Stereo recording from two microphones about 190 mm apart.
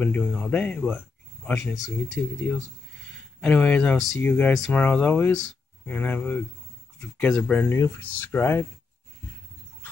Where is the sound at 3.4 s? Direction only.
5° left (ahead or behind).